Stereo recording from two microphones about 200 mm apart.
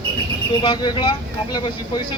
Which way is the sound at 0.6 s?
25° left (ahead or behind).